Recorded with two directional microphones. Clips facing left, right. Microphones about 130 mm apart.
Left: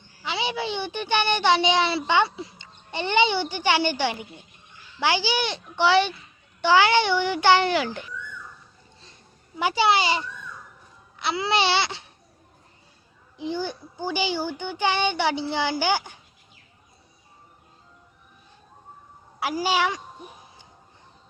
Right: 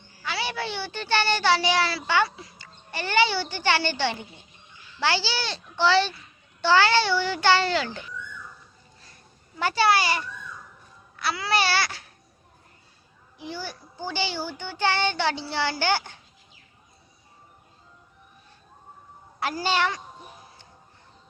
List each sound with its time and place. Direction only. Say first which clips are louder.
0.2 s a child's voice: left 2 dB; 20° left (ahead or behind)
4.9 s child singing: left 3 dB; 15° left (ahead or behind)
9.6 s child singing: left 1 dB; 15° left (ahead or behind)
11.2 s a child's voice: left 2 dB; 20° left (ahead or behind)
13.3 s child singing: left 7 dB; 20° left (ahead or behind)
19.4 s child singing: left 2 dB; 10° left (ahead or behind)